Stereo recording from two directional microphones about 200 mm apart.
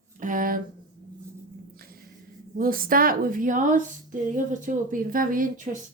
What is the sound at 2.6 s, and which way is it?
A woman's voice, 45° right (ahead or behind).